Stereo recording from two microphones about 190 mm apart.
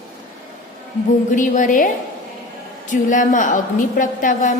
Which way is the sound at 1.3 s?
40° left (ahead or behind).